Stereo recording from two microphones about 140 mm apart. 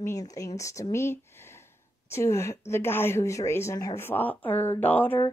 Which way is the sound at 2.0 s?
20° left (ahead or behind).